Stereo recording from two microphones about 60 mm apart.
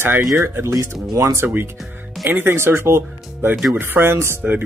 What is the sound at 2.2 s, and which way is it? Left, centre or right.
Speech, right.